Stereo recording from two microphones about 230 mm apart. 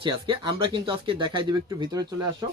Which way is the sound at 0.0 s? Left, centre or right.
Right.